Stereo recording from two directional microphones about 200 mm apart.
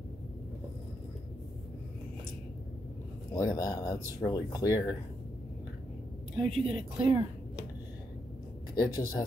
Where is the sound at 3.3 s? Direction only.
15° left (ahead or behind).